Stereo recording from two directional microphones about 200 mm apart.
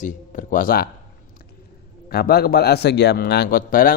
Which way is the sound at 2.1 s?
50° left (ahead or behind).